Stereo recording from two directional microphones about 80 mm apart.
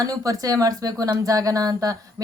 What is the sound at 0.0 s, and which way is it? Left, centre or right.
A woman's voice, right.